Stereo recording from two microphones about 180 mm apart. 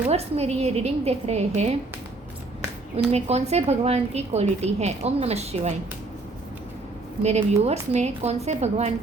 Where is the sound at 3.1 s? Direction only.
35° right (ahead or behind).